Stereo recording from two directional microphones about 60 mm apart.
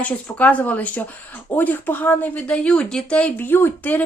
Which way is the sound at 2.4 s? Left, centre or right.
Centre.